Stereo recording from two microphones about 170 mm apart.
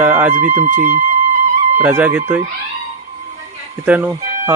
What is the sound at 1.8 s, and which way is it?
Speech, 10° right (ahead or behind).